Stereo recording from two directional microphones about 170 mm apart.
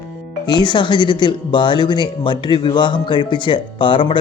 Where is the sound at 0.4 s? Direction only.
25° left (ahead or behind).